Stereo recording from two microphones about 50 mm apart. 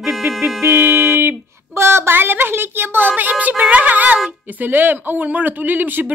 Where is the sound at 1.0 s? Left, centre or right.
Right.